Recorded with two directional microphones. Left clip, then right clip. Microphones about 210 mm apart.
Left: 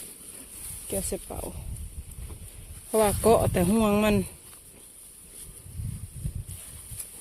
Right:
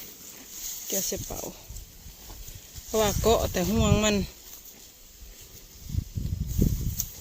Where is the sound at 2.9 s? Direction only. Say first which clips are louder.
Left 2 dB; 15° left (ahead or behind).